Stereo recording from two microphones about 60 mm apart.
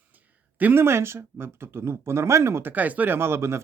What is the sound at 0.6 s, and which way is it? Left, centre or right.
Speech, right.